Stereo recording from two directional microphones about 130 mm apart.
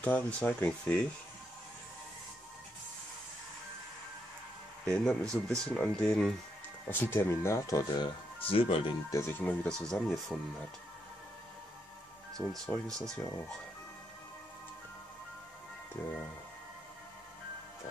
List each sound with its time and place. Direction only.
0.0 s speech: 10° left (ahead or behind)
4.8 s speech: 5° left (ahead or behind)
6.9 s speech: 15° left (ahead or behind)
8.4 s speech: 45° left (ahead or behind)
9.1 s speech: 20° left (ahead or behind)
9.6 s speech: 5° left (ahead or behind)
12.5 s speech: 5° left (ahead or behind)
16.0 s speech: 15° left (ahead or behind)